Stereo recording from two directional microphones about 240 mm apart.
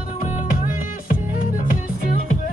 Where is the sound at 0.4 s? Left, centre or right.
Left.